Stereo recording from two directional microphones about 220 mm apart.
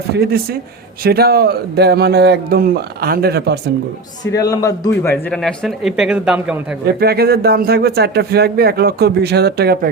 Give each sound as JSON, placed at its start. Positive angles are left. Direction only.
{"t": 0.1, "sound": "speech", "side_deg": -45}
{"t": 4.2, "sound": "a man's voice", "side_deg": 15}
{"t": 5.0, "sound": "speech", "side_deg": 5}
{"t": 6.8, "sound": "speech", "side_deg": -45}